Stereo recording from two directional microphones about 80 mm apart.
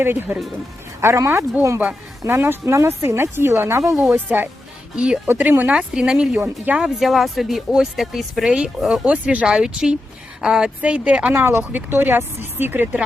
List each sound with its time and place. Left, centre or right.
0.0 s speech: right
4.3 s speech: centre
5.3 s speech: right
5.7 s speech: centre
11.3 s speech: right